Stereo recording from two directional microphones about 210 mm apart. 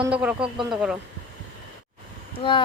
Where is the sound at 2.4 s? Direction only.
20° left (ahead or behind).